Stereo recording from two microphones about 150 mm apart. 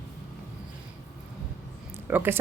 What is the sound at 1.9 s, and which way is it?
Speech, 15° right (ahead or behind).